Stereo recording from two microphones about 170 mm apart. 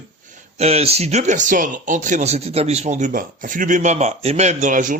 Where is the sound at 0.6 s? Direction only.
35° right (ahead or behind).